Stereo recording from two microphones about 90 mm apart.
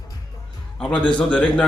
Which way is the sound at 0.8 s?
10° left (ahead or behind).